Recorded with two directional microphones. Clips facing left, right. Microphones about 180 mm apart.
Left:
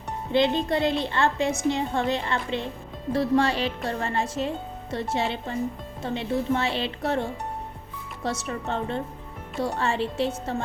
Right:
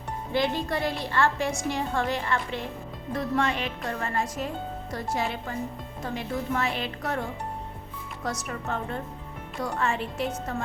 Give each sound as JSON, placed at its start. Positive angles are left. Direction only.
{"t": 0.3, "sound": "speech", "side_deg": 25}